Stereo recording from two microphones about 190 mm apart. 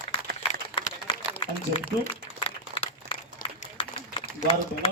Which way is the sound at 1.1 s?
25° left (ahead or behind).